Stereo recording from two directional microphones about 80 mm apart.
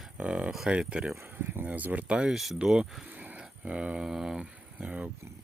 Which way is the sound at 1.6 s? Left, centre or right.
Right.